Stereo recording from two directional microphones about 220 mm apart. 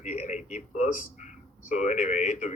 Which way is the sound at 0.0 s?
30° left (ahead or behind).